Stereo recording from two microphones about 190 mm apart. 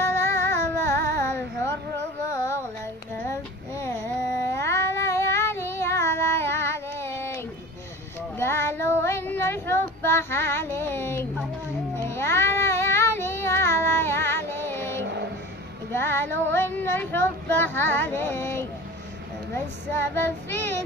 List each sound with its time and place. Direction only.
0.0 s music: 15° left (ahead or behind)
3.3 s child singing: 15° left (ahead or behind)
15.0 s music: 65° right (ahead or behind)
15.9 s child singing: 10° left (ahead or behind)